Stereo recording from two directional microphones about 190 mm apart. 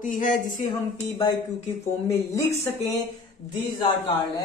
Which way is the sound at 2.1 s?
15° left (ahead or behind).